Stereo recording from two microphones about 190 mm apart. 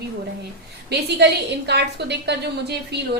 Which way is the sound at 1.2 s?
60° right (ahead or behind).